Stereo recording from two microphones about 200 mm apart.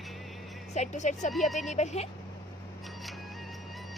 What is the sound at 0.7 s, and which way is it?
Speech, 35° left (ahead or behind).